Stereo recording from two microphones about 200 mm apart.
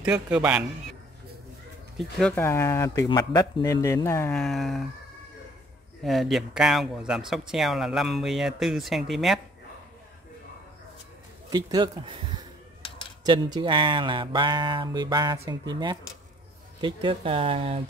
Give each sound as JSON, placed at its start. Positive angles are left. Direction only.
{"t": 0.0, "sound": "speech", "side_deg": -5}
{"t": 2.0, "sound": "speech", "side_deg": 0}
{"t": 6.0, "sound": "speech", "side_deg": 0}
{"t": 11.5, "sound": "speech", "side_deg": -20}
{"t": 13.6, "sound": "speech", "side_deg": -25}